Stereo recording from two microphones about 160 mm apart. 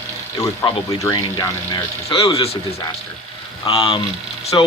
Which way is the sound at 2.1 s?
35° left (ahead or behind).